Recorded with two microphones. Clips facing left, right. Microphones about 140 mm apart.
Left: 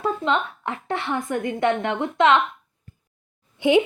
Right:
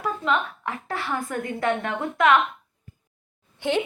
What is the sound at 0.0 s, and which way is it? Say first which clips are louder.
A woman's voice: left 2 dB; 25° left (ahead or behind).